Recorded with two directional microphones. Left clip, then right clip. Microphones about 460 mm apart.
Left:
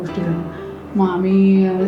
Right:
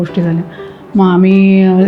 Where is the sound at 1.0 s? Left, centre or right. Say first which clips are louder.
Right 7 dB; right.